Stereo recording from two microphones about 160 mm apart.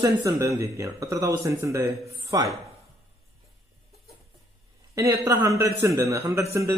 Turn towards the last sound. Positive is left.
turn(degrees=-20)  # may be behind; listen again after turning